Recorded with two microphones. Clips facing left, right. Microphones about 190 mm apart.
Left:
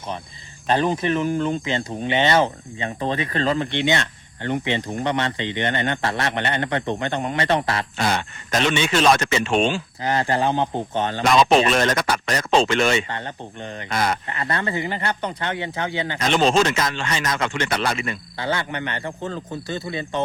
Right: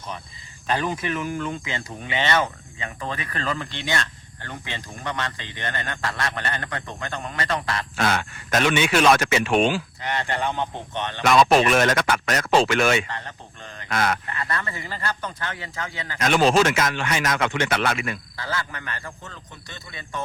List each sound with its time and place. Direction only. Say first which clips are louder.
0.7 s speech: left 5 dB; 30° left (ahead or behind)
7.9 s speech: left 1 dB; centre (ahead or behind)
10.0 s speech: left 5 dB; 35° left (ahead or behind)
11.7 s speech: even; 5° right (ahead or behind)
13.1 s speech: left 4 dB; 30° left (ahead or behind)
13.9 s speech: left 1 dB; centre (ahead or behind)
14.3 s speech: left 4 dB; 30° left (ahead or behind)
16.2 s speech: even; 10° right (ahead or behind)
18.3 s speech: left 6 dB; 25° left (ahead or behind)